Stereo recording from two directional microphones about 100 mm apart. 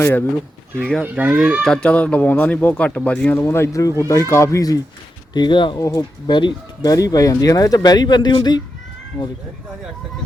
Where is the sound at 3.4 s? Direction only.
25° left (ahead or behind).